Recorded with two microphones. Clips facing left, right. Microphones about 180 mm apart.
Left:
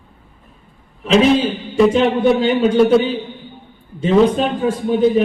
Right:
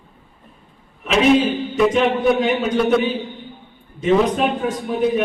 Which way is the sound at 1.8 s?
30° left (ahead or behind).